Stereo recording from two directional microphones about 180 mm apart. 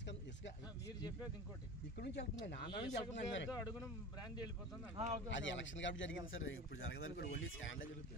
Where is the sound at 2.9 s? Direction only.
85° left.